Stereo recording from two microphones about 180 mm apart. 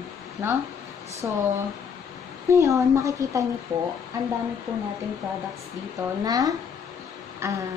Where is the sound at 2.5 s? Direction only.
15° right (ahead or behind).